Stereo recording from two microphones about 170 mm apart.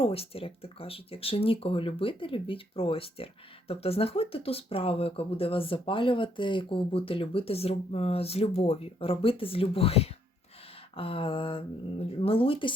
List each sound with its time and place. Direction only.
0.0 s speech: 35° left (ahead or behind)